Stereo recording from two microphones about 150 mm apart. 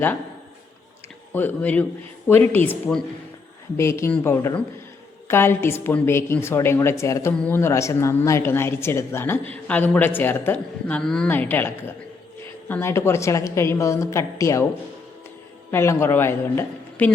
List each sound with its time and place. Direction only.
1.3 s a woman's voice: 10° left (ahead or behind)
15.7 s a woman's voice: 15° left (ahead or behind)